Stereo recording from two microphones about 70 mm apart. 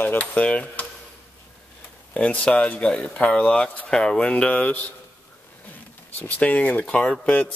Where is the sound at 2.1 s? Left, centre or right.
Centre.